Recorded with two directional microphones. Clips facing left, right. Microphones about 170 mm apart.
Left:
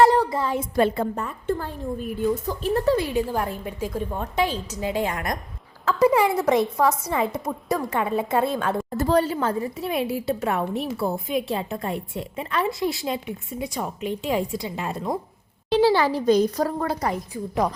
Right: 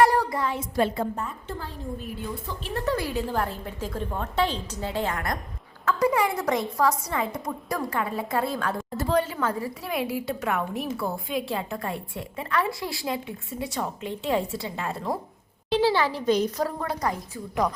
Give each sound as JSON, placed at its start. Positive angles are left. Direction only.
{"t": 0.3, "sound": "speech", "side_deg": 25}
{"t": 0.5, "sound": "a woman's voice", "side_deg": 60}
{"t": 2.9, "sound": "a woman's voice", "side_deg": 20}
{"t": 9.0, "sound": "a woman's voice", "side_deg": 35}
{"t": 15.7, "sound": "a woman's voice", "side_deg": 40}